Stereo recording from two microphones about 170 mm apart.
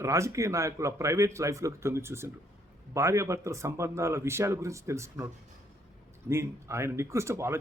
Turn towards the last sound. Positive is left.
turn(degrees=-15)  # may be behind; listen again after turning